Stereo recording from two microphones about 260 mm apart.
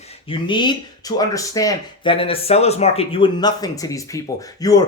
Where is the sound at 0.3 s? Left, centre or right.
Centre.